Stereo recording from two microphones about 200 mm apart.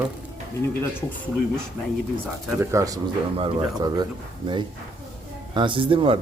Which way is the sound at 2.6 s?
15° right (ahead or behind).